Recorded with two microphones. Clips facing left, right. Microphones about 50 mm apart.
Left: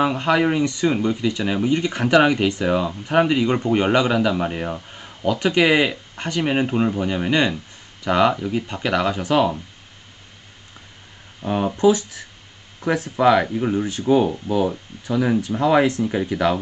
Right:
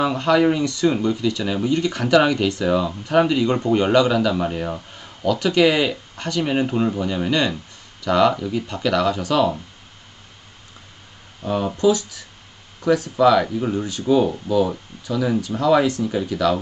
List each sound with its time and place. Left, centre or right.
0.0 s speech: left
11.4 s speech: left